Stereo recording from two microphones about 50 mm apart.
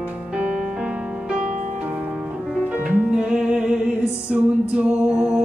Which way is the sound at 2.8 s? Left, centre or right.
Centre.